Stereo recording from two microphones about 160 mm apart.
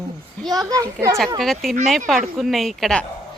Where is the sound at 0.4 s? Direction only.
25° right (ahead or behind).